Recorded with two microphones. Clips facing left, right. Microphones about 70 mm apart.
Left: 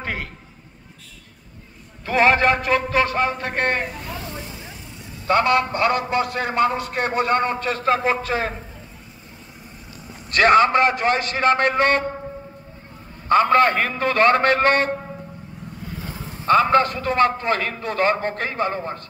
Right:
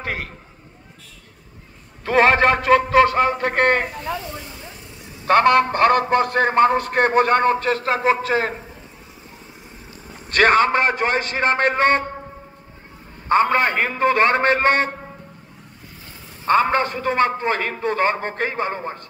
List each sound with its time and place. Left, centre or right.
2.0 s a man's voice: right
5.2 s a man's voice: right
7.9 s a man's voice: right
10.3 s a man's voice: right
13.3 s a man's voice: right
16.4 s a man's voice: right